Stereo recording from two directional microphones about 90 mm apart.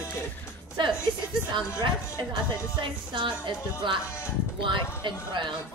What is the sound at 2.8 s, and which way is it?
Speech, 65° right (ahead or behind).